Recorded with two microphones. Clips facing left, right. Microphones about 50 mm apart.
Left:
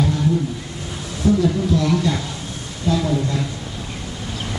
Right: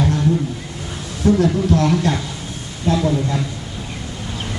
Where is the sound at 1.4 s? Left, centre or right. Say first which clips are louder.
Right 2 dB; right.